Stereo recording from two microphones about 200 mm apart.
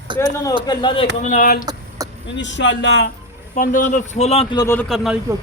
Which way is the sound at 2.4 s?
65° left (ahead or behind).